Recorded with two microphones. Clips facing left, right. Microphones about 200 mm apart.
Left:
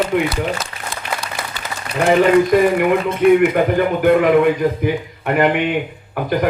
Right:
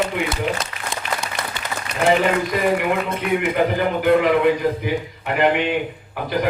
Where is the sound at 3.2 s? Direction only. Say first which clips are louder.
Left 10 dB; 50° left (ahead or behind).